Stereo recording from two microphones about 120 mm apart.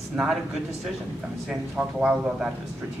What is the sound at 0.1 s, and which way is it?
Speech, 5° right (ahead or behind).